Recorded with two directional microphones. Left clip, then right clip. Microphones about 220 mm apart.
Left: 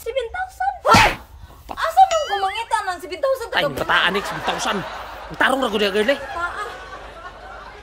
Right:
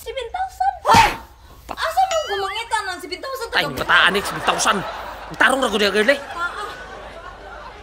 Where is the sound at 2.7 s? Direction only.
25° left (ahead or behind).